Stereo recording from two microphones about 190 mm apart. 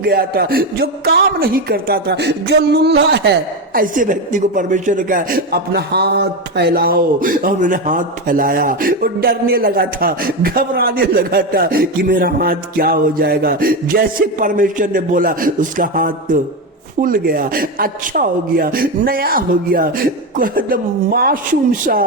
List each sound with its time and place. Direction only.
0.0 s speech: 55° right (ahead or behind)
3.8 s a woman's voice: 45° right (ahead or behind)